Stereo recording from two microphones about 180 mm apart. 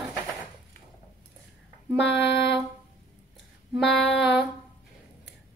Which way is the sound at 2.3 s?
70° left (ahead or behind).